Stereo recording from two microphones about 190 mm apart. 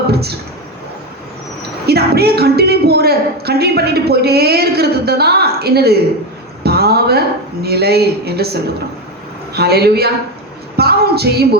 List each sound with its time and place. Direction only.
0.1 s a man's voice: 55° right (ahead or behind)
1.9 s a woman's voice: 55° right (ahead or behind)
6.6 s a sound: 55° right (ahead or behind)
7.6 s a woman's voice: 55° right (ahead or behind)
9.6 s a woman's voice: 55° right (ahead or behind)